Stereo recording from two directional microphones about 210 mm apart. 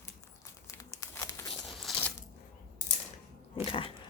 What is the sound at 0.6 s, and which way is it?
Crumpling, 15° left (ahead or behind).